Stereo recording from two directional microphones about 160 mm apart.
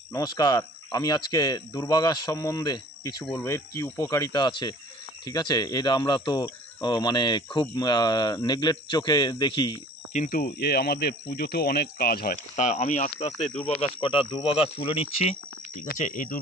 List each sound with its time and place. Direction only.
0.1 s speech: 25° left (ahead or behind)
10.1 s speech: 55° left (ahead or behind)
12.5 s speech: 50° left (ahead or behind)
13.7 s speech: 35° left (ahead or behind)
16.0 s speech: 55° left (ahead or behind)